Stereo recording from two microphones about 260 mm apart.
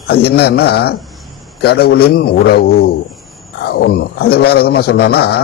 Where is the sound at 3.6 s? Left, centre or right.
Left.